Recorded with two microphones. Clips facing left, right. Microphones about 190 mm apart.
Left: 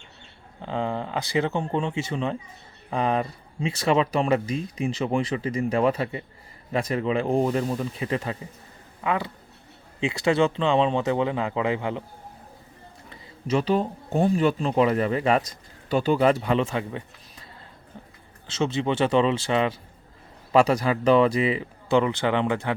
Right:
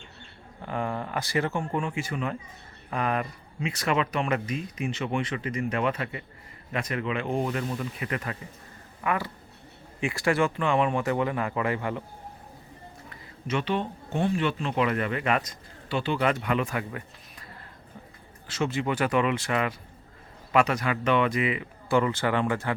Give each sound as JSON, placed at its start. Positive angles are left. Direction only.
{"t": 0.6, "sound": "speech", "side_deg": 20}
{"t": 13.5, "sound": "speech", "side_deg": 35}
{"t": 18.4, "sound": "speech", "side_deg": 25}
{"t": 21.8, "sound": "speech", "side_deg": 20}